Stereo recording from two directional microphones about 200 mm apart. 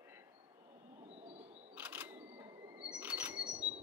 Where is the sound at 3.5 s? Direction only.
30° right (ahead or behind).